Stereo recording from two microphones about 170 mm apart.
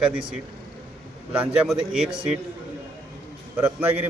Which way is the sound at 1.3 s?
5° right (ahead or behind).